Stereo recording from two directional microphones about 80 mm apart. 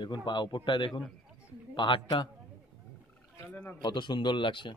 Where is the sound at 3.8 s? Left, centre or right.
Left.